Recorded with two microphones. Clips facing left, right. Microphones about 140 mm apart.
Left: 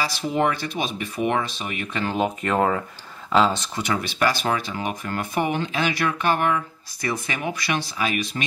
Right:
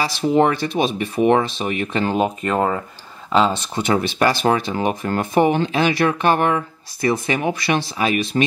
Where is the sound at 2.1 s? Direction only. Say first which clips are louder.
Even; centre (ahead or behind).